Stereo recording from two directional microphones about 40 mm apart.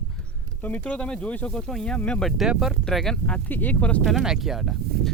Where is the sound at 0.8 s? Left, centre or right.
Left.